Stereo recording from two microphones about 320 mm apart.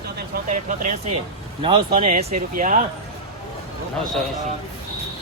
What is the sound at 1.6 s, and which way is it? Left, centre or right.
Speech, centre.